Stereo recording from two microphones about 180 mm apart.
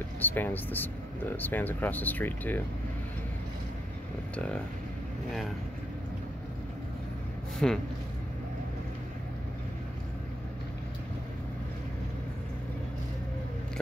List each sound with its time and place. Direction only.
0.2 s speech: 10° left (ahead or behind)
7.5 s speech: 5° left (ahead or behind)